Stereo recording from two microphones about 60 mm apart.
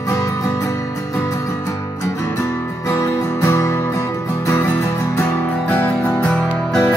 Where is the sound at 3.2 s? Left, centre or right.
Left.